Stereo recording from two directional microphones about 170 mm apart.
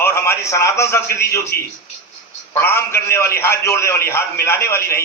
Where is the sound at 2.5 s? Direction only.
15° left (ahead or behind).